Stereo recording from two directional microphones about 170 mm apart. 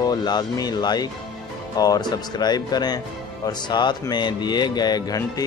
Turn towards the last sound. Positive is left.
turn(degrees=25)  # may be behind; listen again after turning